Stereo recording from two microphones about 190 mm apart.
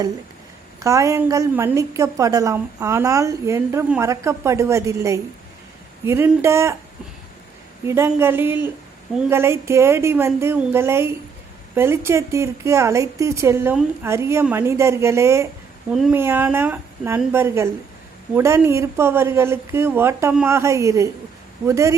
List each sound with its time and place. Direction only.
0.8 s a woman's voice: 15° right (ahead or behind)
7.9 s a woman's voice: 10° right (ahead or behind)
15.9 s a woman's voice: 5° right (ahead or behind)